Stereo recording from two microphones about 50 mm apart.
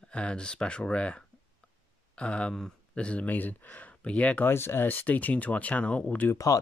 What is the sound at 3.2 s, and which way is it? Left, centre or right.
Speech, left.